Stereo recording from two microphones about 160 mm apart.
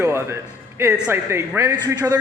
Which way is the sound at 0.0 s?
15° right (ahead or behind).